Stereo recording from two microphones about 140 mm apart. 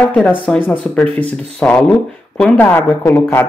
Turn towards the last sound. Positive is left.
turn(degrees=15)  # may be behind; listen again after turning